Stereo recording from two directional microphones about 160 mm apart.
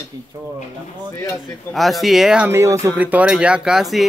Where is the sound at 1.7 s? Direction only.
Centre (ahead or behind).